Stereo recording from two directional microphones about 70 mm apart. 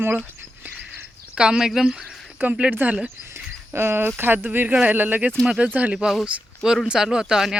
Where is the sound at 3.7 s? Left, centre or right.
Right.